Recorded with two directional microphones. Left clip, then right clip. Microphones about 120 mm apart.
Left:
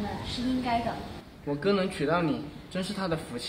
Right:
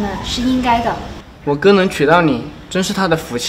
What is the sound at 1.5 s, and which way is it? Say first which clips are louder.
A man's voice: right 16 dB; 25° right (ahead or behind).